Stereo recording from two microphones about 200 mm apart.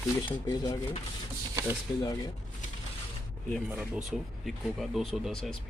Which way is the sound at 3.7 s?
5° right (ahead or behind).